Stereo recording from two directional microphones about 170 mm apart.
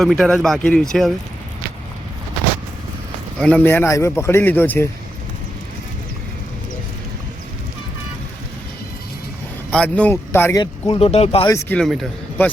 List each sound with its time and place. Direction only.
0.0 s speech: 5° left (ahead or behind)
3.3 s a man's voice: 5° left (ahead or behind)
9.6 s a man's voice: 5° left (ahead or behind)
10.6 s speech: 25° left (ahead or behind)
11.4 s a man's voice: 15° left (ahead or behind)
11.8 s a man's voice: centre (ahead or behind)